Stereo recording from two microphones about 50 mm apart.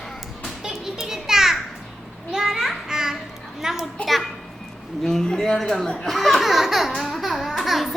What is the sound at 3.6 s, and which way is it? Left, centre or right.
Speech, centre.